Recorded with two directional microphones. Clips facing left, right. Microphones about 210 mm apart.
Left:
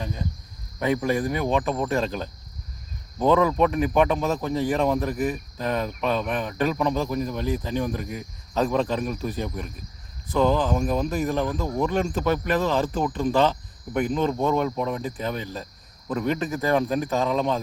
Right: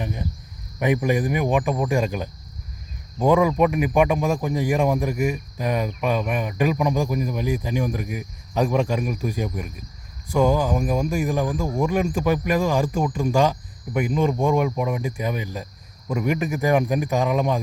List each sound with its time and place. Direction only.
0.0 s speech: 15° right (ahead or behind)